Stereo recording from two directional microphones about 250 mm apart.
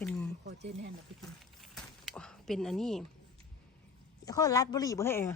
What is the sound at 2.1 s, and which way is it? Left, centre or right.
Speech, centre.